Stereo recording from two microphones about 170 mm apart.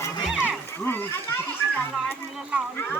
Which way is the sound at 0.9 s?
15° left (ahead or behind).